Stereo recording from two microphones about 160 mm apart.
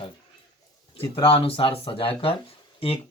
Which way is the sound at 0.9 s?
35° left (ahead or behind).